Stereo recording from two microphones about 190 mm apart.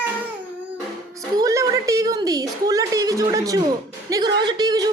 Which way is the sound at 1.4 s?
15° right (ahead or behind).